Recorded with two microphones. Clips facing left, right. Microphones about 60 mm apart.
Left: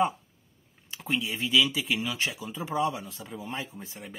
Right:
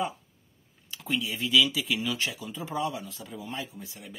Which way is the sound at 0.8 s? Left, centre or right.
Left.